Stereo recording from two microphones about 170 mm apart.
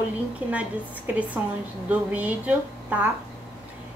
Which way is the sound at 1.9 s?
10° right (ahead or behind).